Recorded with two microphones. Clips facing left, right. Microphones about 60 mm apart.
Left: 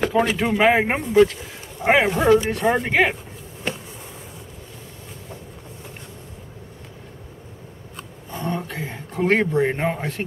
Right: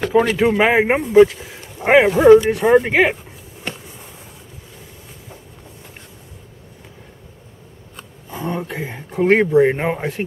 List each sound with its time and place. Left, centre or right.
0.1 s a man's voice: centre
8.3 s speech: centre